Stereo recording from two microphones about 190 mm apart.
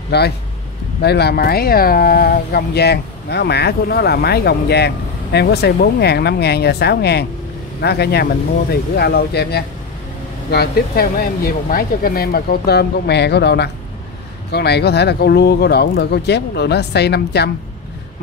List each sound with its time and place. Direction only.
0.1 s speech: 60° left (ahead or behind)